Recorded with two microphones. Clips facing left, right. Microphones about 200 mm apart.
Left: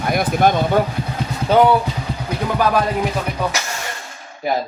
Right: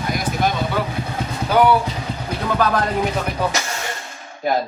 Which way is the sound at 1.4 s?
25° left (ahead or behind).